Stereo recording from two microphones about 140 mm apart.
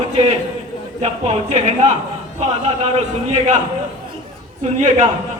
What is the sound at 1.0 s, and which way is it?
Speech, 50° right (ahead or behind).